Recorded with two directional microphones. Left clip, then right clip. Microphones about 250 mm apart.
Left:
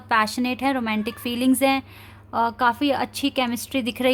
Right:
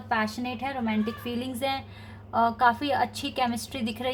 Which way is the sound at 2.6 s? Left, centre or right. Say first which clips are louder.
Left 2 dB; left.